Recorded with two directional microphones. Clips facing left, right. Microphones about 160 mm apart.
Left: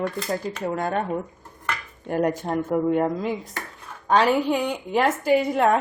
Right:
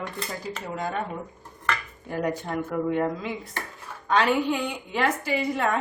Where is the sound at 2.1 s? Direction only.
50° left (ahead or behind).